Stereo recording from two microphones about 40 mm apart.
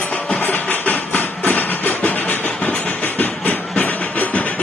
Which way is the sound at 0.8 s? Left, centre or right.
Left.